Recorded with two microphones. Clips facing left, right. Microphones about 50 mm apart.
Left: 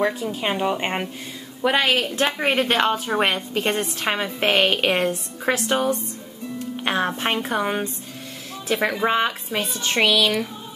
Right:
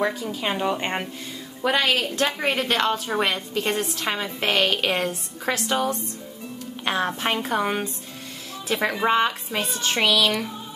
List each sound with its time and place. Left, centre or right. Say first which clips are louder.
0.3 s a woman's voice: left 2 dB; centre